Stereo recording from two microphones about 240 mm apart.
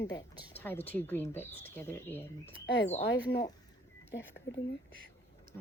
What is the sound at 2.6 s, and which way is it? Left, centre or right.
Speech, left.